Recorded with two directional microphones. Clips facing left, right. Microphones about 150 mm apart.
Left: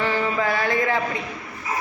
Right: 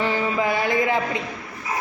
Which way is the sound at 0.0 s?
15° right (ahead or behind).